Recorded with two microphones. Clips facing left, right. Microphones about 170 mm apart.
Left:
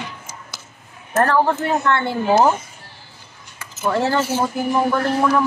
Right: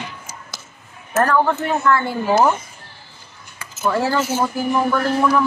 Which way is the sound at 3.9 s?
25° left (ahead or behind).